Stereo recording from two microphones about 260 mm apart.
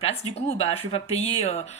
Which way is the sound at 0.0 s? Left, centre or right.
Left.